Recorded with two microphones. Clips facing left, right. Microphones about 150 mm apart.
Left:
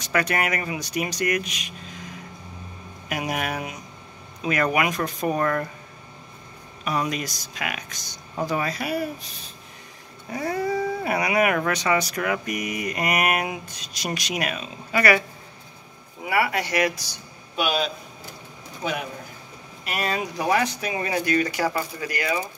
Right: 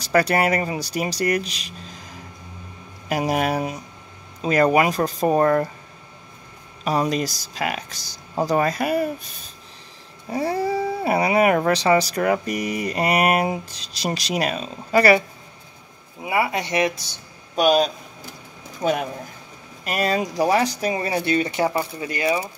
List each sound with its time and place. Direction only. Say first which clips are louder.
0.0 s speech: right 5 dB; 35° right (ahead or behind)
3.1 s speech: right 6 dB; 35° right (ahead or behind)
6.8 s speech: right 5 dB; 35° right (ahead or behind)
10.3 s speech: right 3 dB; 30° right (ahead or behind)
16.3 s speech: right 1 dB; 20° right (ahead or behind)
17.6 s a man's voice: right 7 dB; 40° right (ahead or behind); by 22.4 s 25° right (ahead or behind)